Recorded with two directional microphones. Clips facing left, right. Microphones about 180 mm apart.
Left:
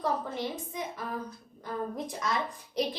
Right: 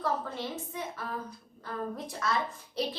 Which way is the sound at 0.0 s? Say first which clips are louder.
Left 1 dB; 15° left (ahead or behind).